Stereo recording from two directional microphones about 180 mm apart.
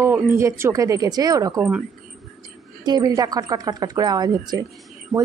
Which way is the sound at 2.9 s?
20° right (ahead or behind).